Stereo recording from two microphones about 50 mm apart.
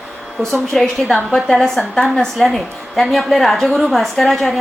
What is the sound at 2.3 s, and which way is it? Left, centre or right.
A woman's voice, centre.